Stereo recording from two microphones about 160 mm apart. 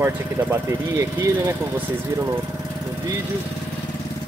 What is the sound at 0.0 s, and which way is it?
Speech, 15° right (ahead or behind).